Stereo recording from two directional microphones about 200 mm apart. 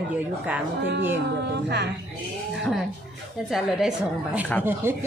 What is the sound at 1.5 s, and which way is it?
Speech, 55° right (ahead or behind).